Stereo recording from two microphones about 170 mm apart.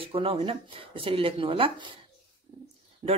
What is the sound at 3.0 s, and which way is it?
Speech, 35° right (ahead or behind).